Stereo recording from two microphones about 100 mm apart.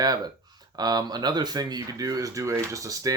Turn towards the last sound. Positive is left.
turn(degrees=-35)  # may be behind; listen again after turning